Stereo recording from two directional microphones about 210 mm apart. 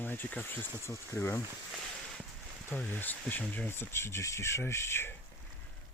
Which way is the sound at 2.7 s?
5° left (ahead or behind).